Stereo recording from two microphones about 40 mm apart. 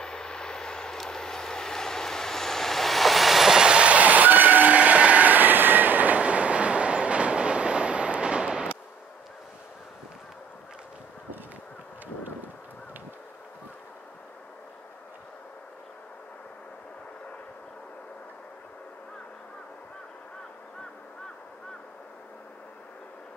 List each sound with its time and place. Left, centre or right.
0.0 s vehicle: left; by 3.5 s centre
3.5 s train: right